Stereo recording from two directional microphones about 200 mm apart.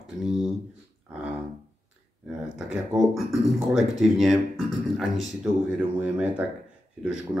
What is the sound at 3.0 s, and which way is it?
Speech, centre (ahead or behind).